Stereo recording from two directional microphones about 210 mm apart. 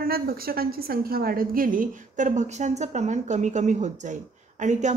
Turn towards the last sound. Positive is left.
turn(degrees=-35)  # may be behind; listen again after turning